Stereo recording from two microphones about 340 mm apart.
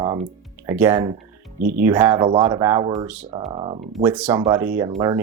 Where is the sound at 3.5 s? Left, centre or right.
Centre.